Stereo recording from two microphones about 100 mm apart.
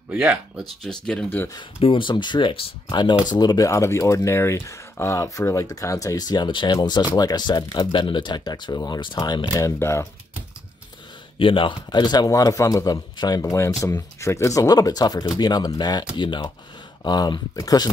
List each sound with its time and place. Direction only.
0.1 s speech: 10° right (ahead or behind)
0.8 s speech: 5° left (ahead or behind)
1.8 s speech: 55° left (ahead or behind)
9.5 s speech: 35° left (ahead or behind)
11.3 s speech: 60° left (ahead or behind)
12.3 s speech: 35° left (ahead or behind)